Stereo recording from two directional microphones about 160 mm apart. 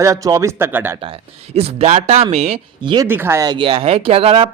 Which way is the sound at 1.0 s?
40° right (ahead or behind).